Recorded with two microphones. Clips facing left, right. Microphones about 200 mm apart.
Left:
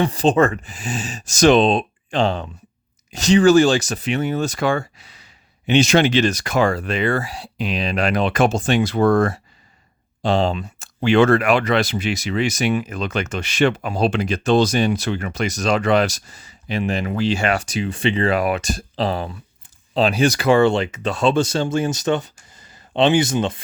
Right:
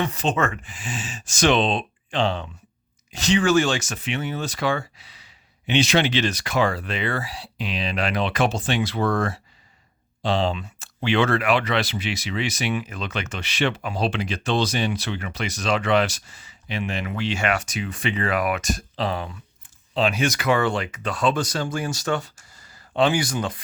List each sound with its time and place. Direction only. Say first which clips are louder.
0.0 s speech: left 7 dB; 35° left (ahead or behind)